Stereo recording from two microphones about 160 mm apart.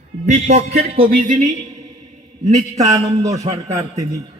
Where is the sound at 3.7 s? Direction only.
20° right (ahead or behind).